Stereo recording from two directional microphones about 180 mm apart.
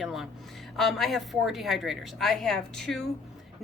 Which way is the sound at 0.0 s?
Centre (ahead or behind).